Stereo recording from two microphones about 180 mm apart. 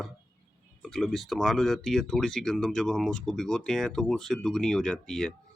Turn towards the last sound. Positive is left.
turn(degrees=5)  # may be behind; listen again after turning